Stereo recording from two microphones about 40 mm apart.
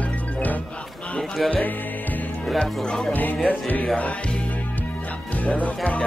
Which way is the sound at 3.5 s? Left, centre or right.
Left.